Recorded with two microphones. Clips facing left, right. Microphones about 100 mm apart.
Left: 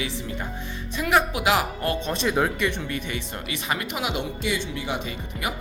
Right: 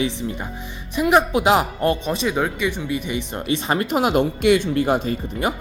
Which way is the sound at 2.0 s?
5° right (ahead or behind).